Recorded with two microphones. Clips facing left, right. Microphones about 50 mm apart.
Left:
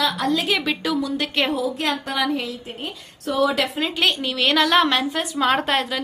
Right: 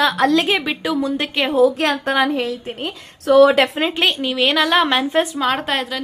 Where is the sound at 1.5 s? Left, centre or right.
Right.